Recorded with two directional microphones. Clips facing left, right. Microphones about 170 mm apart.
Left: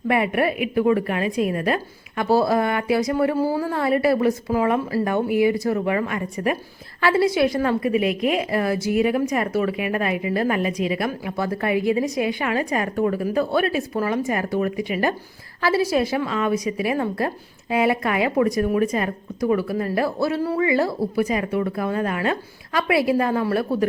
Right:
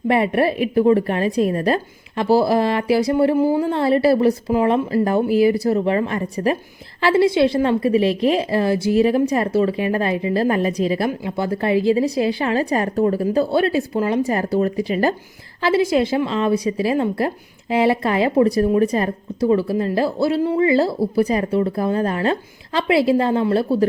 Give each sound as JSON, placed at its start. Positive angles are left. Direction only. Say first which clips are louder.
{"t": 0.1, "sound": "a woman's voice", "louder": "right 3 dB", "side_deg": -30}
{"t": 15.6, "sound": "a woman's voice", "louder": "right 3 dB", "side_deg": -25}